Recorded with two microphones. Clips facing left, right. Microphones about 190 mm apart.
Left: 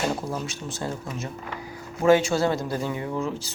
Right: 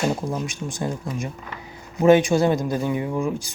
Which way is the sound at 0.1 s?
15° right (ahead or behind).